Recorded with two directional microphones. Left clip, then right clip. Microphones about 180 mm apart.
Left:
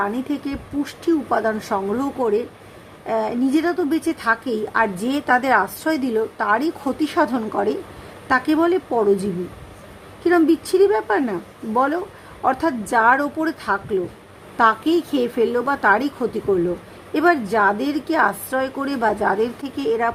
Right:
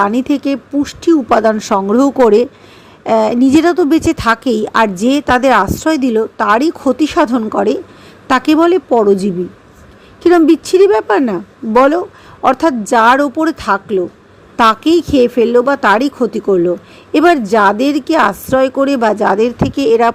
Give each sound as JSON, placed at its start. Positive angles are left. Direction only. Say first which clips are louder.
{"t": 0.0, "sound": "a woman's voice", "louder": "right 10 dB", "side_deg": -40}